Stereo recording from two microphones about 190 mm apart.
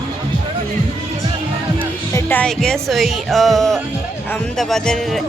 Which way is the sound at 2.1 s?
10° left (ahead or behind).